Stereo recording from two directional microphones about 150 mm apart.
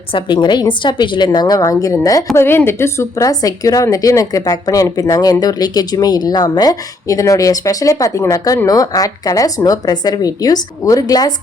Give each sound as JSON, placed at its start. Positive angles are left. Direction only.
{"t": 0.1, "sound": "a woman's voice", "side_deg": 30}